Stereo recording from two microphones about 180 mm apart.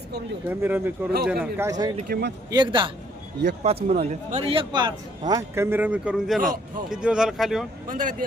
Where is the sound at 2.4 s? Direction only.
25° right (ahead or behind).